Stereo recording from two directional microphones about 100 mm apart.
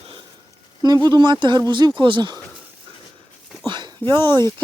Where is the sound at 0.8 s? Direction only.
40° right (ahead or behind).